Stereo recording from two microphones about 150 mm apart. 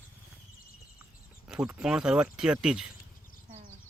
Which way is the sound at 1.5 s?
5° right (ahead or behind).